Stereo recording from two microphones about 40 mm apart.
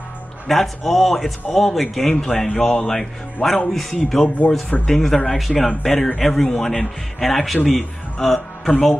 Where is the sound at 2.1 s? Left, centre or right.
Centre.